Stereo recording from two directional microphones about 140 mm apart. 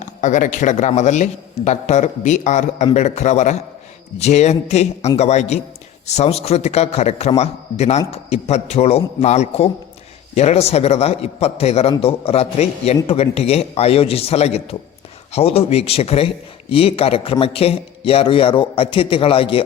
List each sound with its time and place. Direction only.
0.0 s a man's voice: 60° left (ahead or behind); by 19.6 s 40° left (ahead or behind)